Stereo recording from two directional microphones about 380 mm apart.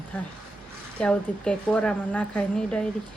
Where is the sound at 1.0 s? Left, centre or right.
Centre.